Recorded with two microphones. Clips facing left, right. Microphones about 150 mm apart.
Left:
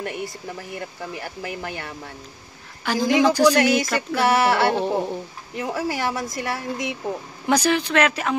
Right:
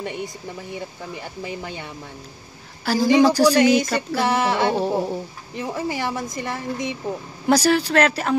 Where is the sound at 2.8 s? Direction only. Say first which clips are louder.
Right 3 dB; 35° right (ahead or behind).